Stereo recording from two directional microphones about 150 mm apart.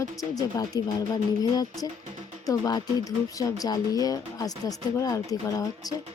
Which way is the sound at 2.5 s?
25° left (ahead or behind).